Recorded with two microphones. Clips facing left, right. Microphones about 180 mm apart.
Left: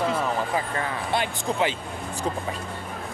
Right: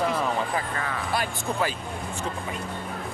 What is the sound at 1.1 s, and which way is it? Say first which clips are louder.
Speech: left 3 dB; 20° left (ahead or behind).